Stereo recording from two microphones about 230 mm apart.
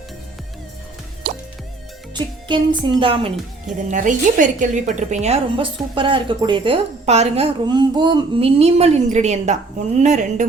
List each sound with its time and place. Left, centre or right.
1.2 s music: right
2.1 s music: centre
3.0 s speech: right
3.8 s a woman's voice: right